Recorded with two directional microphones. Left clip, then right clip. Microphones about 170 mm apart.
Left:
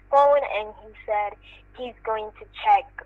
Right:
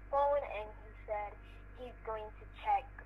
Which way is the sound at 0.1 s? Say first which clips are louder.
Left 15 dB; 70° left (ahead or behind).